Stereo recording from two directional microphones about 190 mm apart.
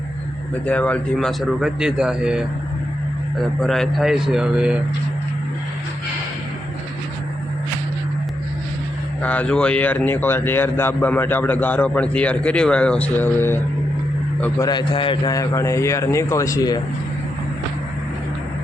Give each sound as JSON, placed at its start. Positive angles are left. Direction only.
{"t": 0.6, "sound": "a man's voice", "side_deg": 5}
{"t": 3.6, "sound": "a man's voice", "side_deg": 0}
{"t": 9.2, "sound": "speech", "side_deg": 5}
{"t": 14.6, "sound": "speech", "side_deg": 20}